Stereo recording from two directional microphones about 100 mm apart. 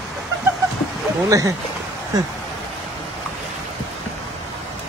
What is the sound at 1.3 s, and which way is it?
Speech, 35° right (ahead or behind).